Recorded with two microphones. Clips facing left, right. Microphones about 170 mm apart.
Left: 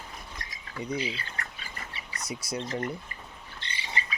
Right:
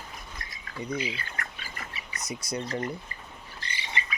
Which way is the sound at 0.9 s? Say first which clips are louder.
Even; 30° left (ahead or behind).